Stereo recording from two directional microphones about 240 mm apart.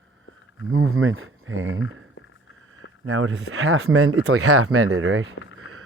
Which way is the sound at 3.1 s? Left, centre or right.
Right.